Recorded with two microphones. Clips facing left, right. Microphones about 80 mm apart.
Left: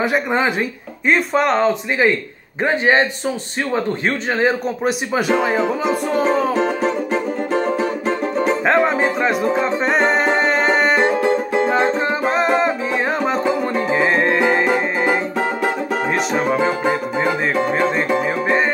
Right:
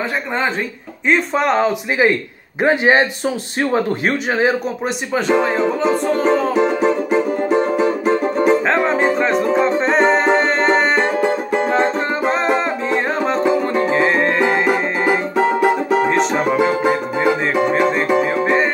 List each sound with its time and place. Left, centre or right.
0.0 s speech: centre
4.8 s speech: centre
6.6 s music: centre